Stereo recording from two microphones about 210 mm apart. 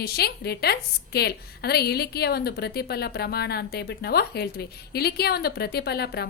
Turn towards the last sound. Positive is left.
turn(degrees=50)  # may be behind; listen again after turning